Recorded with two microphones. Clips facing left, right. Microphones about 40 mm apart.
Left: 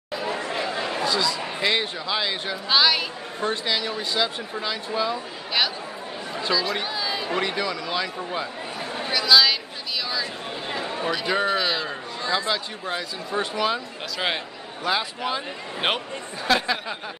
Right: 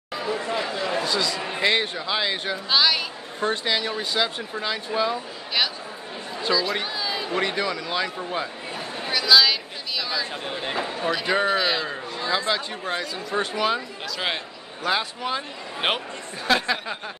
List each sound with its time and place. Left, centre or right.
0.2 s chatter: left
1.0 s speech: centre
2.7 s a man's voice: centre
3.3 s speech: centre
6.4 s speech: centre
10.6 s a sound: right
11.1 s a man's voice: centre